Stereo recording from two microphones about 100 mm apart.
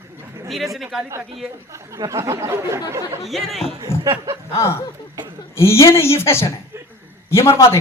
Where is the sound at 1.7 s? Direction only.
30° right (ahead or behind).